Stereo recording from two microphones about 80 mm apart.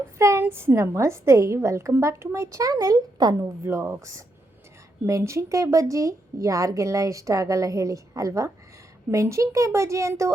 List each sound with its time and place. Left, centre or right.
0.2 s a woman's voice: right
3.6 s a woman's voice: right